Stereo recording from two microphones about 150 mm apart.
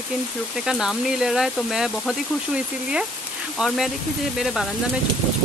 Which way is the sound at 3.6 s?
Centre (ahead or behind).